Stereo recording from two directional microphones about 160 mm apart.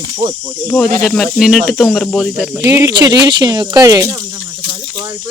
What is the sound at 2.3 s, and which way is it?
Speech, 10° right (ahead or behind).